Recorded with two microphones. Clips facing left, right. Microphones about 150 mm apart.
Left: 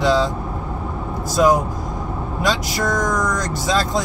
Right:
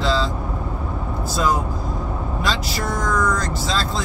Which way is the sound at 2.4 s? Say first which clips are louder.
Left 5 dB; 15° left (ahead or behind).